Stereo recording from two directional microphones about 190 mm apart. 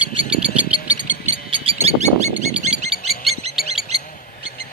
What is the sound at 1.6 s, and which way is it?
Bird, 35° right (ahead or behind).